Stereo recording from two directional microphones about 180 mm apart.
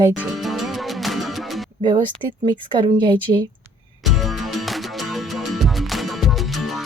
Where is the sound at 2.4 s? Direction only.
30° right (ahead or behind).